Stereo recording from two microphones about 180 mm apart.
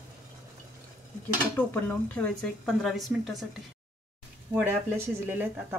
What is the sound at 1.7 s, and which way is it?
A woman's voice, 10° left (ahead or behind).